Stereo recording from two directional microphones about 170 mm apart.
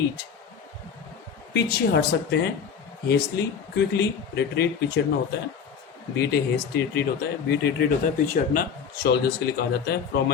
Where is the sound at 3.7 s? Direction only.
75° left (ahead or behind).